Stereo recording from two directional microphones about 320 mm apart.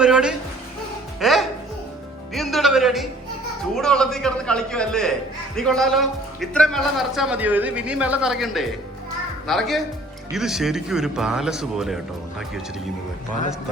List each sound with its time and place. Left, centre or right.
0.0 s a sound: centre
1.2 s music: centre
3.8 s speech: centre